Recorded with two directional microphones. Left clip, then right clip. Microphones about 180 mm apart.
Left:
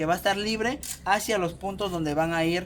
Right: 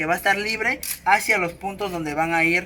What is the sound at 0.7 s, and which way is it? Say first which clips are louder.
Speech: right 9 dB; 50° left (ahead or behind).